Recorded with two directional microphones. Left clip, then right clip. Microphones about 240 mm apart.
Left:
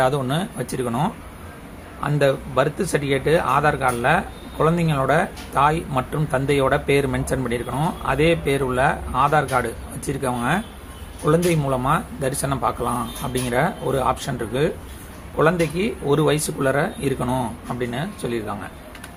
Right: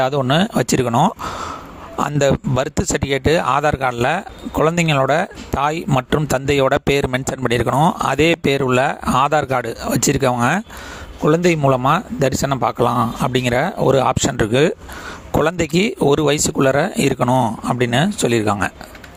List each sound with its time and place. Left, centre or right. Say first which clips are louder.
0.0 s speech: right 4 dB; right